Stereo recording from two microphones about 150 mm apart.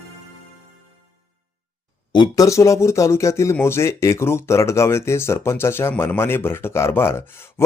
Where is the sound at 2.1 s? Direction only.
25° left (ahead or behind).